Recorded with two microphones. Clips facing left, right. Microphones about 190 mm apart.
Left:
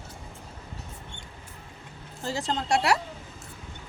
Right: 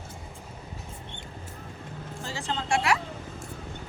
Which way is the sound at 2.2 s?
40° left (ahead or behind).